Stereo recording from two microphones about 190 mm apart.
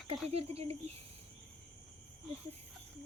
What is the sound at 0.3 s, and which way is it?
Female singing, 35° right (ahead or behind).